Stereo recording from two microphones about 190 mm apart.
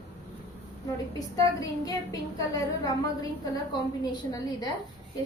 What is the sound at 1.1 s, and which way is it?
A woman's voice, 15° left (ahead or behind).